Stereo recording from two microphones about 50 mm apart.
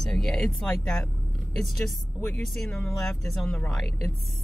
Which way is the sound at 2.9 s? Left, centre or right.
Centre.